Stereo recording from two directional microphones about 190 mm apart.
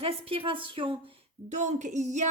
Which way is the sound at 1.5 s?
40° right (ahead or behind).